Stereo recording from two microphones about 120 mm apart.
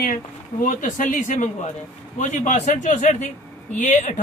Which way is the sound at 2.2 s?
75° left (ahead or behind).